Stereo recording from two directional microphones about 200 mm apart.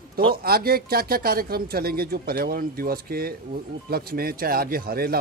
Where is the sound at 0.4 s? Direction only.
50° right (ahead or behind).